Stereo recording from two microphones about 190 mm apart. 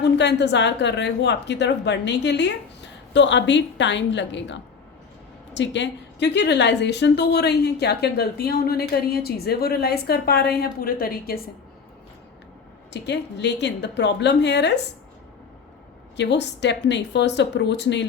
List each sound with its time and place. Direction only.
0.0 s a woman's voice: 65° left (ahead or behind)
12.9 s a woman's voice: 65° left (ahead or behind)
16.1 s a woman's voice: 65° left (ahead or behind)